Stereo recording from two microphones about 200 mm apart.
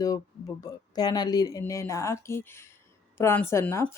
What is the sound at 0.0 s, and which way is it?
A woman's voice, 15° left (ahead or behind).